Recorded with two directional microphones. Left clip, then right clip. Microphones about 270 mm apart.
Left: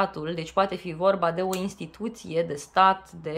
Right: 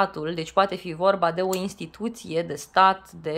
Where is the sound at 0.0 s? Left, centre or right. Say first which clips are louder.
Right 2 dB; centre.